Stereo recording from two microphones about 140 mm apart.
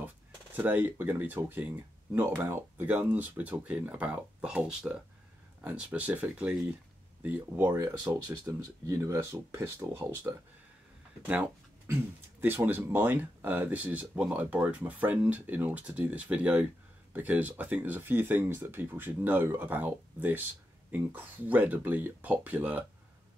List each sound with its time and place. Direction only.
0.6 s speech: 15° right (ahead or behind)